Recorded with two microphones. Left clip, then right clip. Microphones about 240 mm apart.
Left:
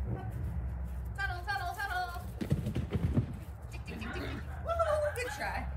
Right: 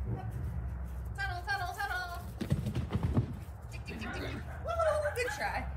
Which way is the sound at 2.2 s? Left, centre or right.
Centre.